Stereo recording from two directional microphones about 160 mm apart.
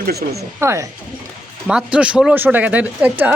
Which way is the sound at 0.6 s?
15° right (ahead or behind).